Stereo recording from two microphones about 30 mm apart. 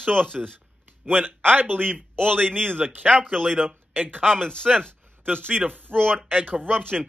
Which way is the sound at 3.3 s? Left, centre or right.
Centre.